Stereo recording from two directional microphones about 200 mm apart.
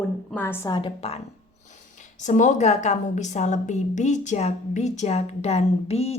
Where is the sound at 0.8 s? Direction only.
25° left (ahead or behind).